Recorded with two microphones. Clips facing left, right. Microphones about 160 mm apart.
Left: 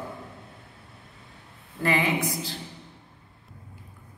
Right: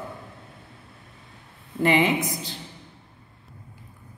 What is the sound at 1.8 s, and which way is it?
Speech, 20° right (ahead or behind).